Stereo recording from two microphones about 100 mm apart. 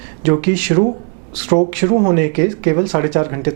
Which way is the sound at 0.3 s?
15° right (ahead or behind).